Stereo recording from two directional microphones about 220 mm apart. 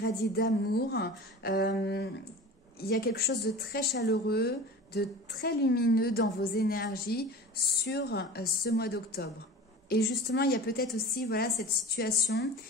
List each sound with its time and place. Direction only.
0.0 s speech: 45° left (ahead or behind)